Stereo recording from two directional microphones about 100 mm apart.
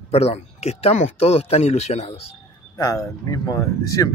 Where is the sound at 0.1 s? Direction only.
90° left.